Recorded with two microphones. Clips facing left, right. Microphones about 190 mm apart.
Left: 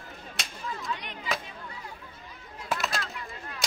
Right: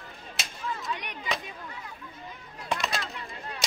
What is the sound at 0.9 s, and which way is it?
Chop, 20° right (ahead or behind).